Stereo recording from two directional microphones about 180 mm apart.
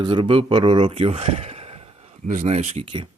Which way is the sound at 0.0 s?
25° right (ahead or behind).